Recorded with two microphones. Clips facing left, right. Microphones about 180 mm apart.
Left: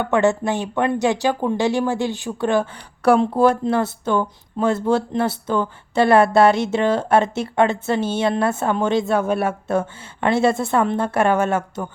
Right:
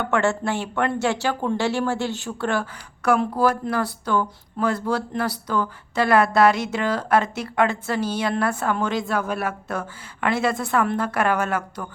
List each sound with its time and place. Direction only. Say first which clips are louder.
0.0 s speech: left 4 dB; 15° left (ahead or behind)
3.0 s speech: left 5 dB; 30° left (ahead or behind)